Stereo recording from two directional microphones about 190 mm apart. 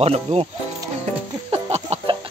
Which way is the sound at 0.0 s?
30° right (ahead or behind).